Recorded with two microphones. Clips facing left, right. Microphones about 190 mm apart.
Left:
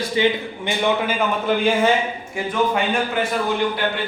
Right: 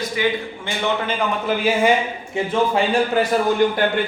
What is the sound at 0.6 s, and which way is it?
Speech, 15° left (ahead or behind).